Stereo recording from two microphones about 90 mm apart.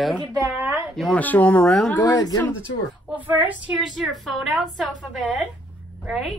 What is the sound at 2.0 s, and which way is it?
Speech, 45° left (ahead or behind).